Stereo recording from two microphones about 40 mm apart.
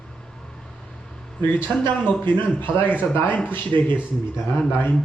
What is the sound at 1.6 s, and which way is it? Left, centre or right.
Speech, left.